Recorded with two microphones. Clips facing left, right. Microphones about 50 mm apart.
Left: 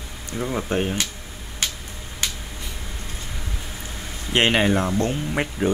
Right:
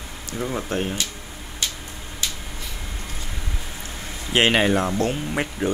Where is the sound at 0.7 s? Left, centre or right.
Centre.